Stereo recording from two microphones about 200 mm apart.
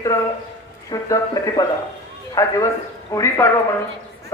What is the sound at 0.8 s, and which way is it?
Speech, 15° left (ahead or behind).